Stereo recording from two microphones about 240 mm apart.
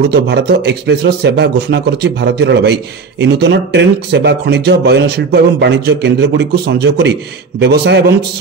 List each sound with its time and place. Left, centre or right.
0.1 s speech: right